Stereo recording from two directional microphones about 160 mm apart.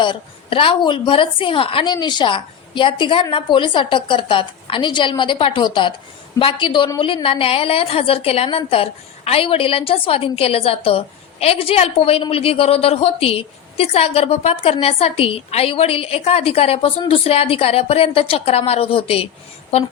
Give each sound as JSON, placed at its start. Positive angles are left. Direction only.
{"t": 0.0, "sound": "a woman's voice", "side_deg": 30}